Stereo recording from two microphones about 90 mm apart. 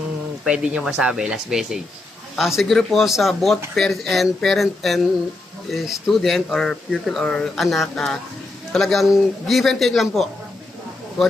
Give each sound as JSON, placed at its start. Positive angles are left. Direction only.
{"t": 0.4, "sound": "a man's voice", "side_deg": -10}